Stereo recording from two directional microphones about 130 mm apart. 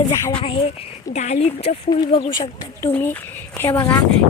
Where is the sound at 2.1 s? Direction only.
40° left (ahead or behind).